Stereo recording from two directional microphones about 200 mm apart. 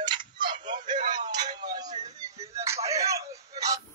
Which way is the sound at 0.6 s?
40° right (ahead or behind).